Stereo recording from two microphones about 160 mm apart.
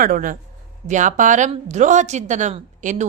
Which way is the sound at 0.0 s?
60° right (ahead or behind).